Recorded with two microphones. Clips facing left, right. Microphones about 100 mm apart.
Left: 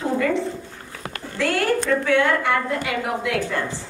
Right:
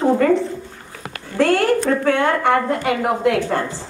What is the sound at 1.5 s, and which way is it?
A woman's voice, 40° right (ahead or behind).